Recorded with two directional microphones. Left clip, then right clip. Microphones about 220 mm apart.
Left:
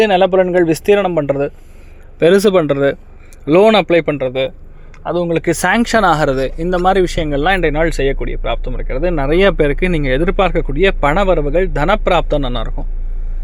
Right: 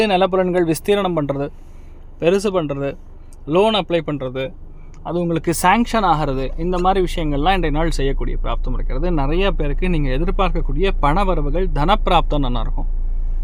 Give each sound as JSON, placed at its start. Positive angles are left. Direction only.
{"t": 0.0, "sound": "speech", "side_deg": 0}
{"t": 2.1, "sound": "speech", "side_deg": 15}
{"t": 9.3, "sound": "speech", "side_deg": 20}